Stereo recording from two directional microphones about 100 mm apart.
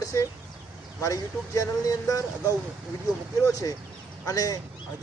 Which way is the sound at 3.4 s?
35° left (ahead or behind).